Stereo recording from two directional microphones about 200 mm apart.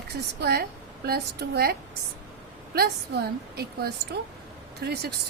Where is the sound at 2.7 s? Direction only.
55° right (ahead or behind).